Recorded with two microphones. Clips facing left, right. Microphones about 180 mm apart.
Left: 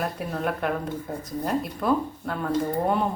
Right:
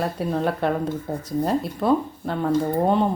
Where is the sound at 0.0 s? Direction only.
30° right (ahead or behind).